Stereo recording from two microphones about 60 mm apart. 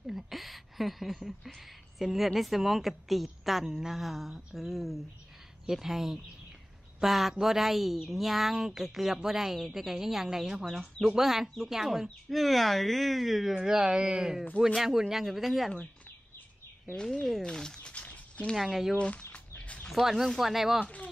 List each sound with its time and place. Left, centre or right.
0.0 s speech: centre
16.9 s speech: centre
17.9 s a sound: left
18.6 s speech: centre
18.9 s speech: centre
19.3 s a sound: left
19.9 s speech: centre
20.8 s speech: left